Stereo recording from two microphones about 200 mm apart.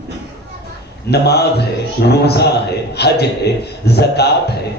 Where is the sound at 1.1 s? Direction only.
55° left (ahead or behind).